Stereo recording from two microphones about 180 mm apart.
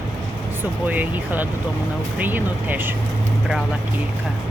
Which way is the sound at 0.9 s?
10° right (ahead or behind).